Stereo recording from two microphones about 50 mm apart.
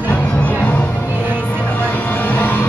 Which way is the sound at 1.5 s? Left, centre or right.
Left.